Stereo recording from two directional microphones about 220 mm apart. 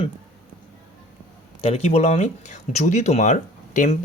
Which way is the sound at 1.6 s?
25° left (ahead or behind).